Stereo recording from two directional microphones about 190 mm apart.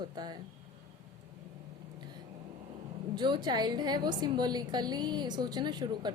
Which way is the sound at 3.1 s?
25° right (ahead or behind).